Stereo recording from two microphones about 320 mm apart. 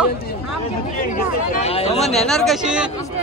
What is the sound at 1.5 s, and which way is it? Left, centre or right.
Speech, centre.